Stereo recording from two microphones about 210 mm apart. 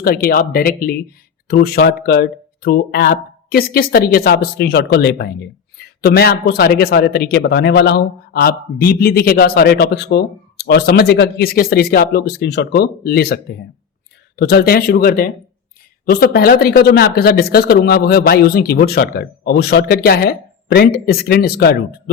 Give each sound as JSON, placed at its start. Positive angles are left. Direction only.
{"t": 0.0, "sound": "speech", "side_deg": 45}